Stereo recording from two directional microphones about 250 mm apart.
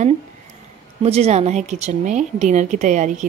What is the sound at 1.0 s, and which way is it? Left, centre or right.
A woman's voice, right.